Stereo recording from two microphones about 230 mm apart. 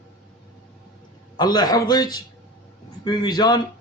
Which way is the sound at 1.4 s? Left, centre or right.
Centre.